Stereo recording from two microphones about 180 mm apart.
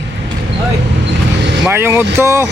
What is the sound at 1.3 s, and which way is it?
Vehicle, 80° right.